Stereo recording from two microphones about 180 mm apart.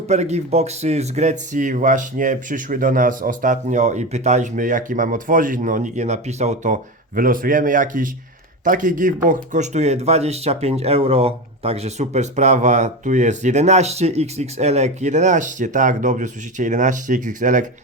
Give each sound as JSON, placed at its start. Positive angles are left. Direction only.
{"t": 0.1, "sound": "speech", "side_deg": -40}
{"t": 7.2, "sound": "speech", "side_deg": -50}